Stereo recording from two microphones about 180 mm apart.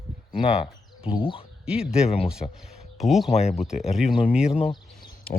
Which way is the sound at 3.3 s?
35° left (ahead or behind).